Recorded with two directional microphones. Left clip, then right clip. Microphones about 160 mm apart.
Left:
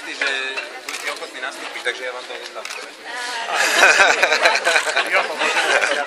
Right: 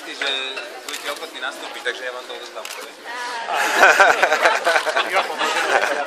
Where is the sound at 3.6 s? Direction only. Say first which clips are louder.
Even; 40° right (ahead or behind).